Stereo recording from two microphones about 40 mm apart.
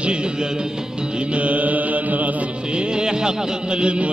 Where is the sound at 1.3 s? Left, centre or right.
Right.